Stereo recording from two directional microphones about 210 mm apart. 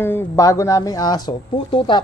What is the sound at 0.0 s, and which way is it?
A man's voice, 10° left (ahead or behind).